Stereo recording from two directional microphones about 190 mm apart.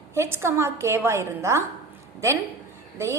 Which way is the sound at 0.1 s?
15° right (ahead or behind).